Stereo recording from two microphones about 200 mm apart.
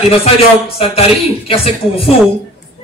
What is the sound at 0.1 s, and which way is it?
A man's voice, 30° left (ahead or behind).